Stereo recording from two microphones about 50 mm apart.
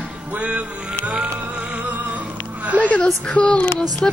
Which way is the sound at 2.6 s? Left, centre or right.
Right.